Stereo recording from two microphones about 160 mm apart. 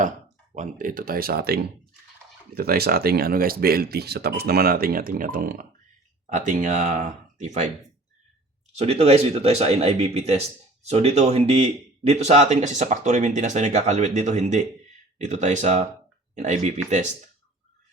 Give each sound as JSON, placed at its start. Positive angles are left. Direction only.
{"t": 0.5, "sound": "speech", "side_deg": -55}
{"t": 2.6, "sound": "speech", "side_deg": -75}
{"t": 6.2, "sound": "speech", "side_deg": -50}
{"t": 8.7, "sound": "speech", "side_deg": -40}